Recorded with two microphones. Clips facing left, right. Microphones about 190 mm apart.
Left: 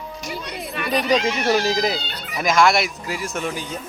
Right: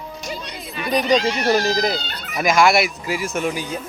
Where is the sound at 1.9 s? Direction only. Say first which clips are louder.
Right 1 dB; 45° right (ahead or behind).